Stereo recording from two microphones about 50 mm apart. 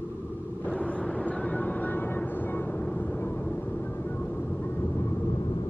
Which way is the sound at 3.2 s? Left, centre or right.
Left.